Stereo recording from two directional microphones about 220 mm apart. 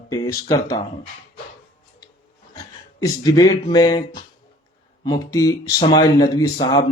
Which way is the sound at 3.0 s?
15° left (ahead or behind).